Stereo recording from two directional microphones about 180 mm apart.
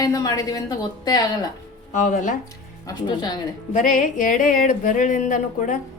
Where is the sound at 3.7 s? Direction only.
45° left (ahead or behind).